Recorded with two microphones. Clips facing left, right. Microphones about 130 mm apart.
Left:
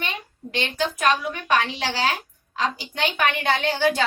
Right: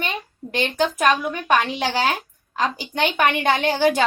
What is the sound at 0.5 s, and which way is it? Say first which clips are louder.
A woman's voice: right 4 dB; 45° right (ahead or behind).